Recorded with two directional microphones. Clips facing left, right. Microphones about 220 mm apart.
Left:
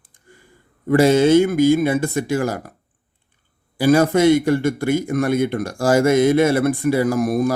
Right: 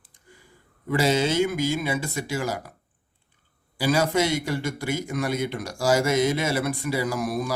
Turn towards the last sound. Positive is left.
turn(degrees=50)  # may be behind; listen again after turning